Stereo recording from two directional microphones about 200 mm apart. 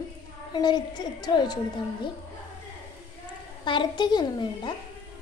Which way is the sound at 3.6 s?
25° left (ahead or behind).